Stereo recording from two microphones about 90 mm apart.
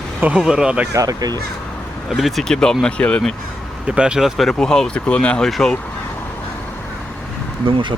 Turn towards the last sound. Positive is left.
turn(degrees=-65)  # may be behind; listen again after turning